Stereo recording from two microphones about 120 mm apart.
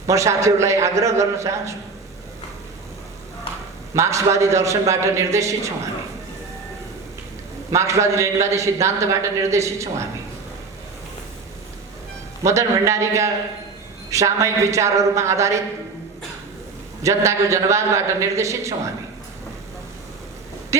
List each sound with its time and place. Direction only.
0.1 s a man's voice: 25° right (ahead or behind)
3.9 s a man's voice: 25° right (ahead or behind)
7.7 s a man's voice: 25° right (ahead or behind)
12.5 s a man's voice: 25° right (ahead or behind)
17.0 s a man's voice: 25° right (ahead or behind)